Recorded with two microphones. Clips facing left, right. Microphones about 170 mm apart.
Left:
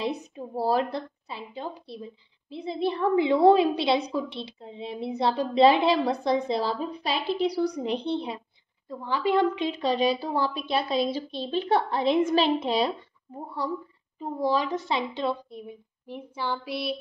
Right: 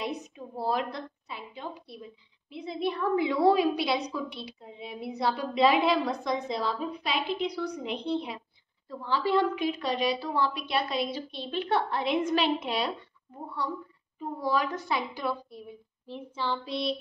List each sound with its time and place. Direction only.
0.6 s a woman's voice: 35° left (ahead or behind)
8.8 s a woman's voice: 15° left (ahead or behind)
14.4 s a woman's voice: 30° left (ahead or behind)
16.1 s child singing: 10° left (ahead or behind)